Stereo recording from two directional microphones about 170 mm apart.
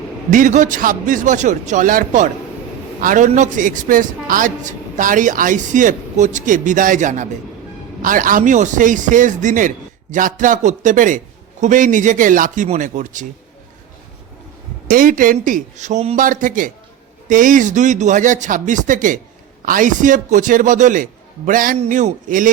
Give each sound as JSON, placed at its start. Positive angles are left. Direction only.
{"t": 0.3, "sound": "a man's voice", "side_deg": -50}
{"t": 14.8, "sound": "a man's voice", "side_deg": -50}